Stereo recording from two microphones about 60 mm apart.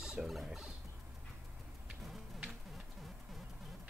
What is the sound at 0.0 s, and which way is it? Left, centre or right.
Rodents, centre.